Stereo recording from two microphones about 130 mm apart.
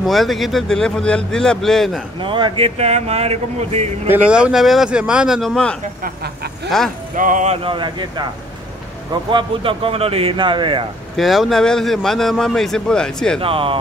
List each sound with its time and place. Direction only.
0.0 s a man's voice: centre (ahead or behind)
2.1 s speech: 40° right (ahead or behind); by 3.9 s 55° right (ahead or behind)
4.1 s speech: 10° right (ahead or behind)
7.2 s speech: 85° right
7.6 s speech: 40° right (ahead or behind)
9.3 s speech: 40° right (ahead or behind)
11.1 s a man's voice: centre (ahead or behind)
13.4 s speech: 45° right (ahead or behind)